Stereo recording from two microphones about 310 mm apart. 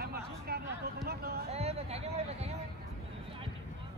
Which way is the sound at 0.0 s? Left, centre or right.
Right.